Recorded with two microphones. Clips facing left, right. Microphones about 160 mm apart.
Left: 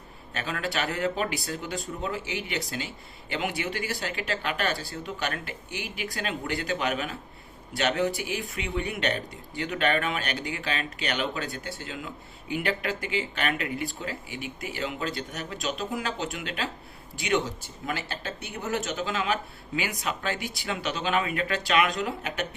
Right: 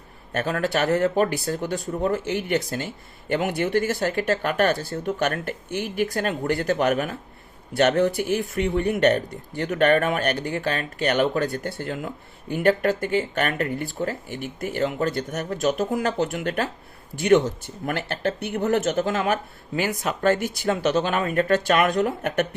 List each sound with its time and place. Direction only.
0.3 s speech: 45° right (ahead or behind)